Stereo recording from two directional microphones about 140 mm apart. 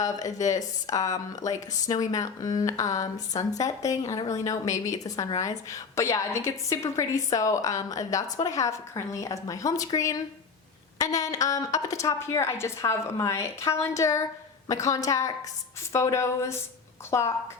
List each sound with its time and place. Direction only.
0.0 s a woman's voice: 25° left (ahead or behind)
11.2 s a woman's voice: 25° left (ahead or behind)